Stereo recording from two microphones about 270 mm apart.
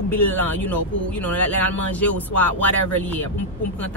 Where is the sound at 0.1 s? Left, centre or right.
Centre.